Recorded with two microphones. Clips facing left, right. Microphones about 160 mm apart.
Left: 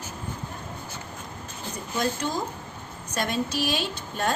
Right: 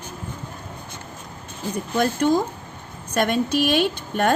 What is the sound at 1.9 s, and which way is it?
A woman's voice, 55° right (ahead or behind).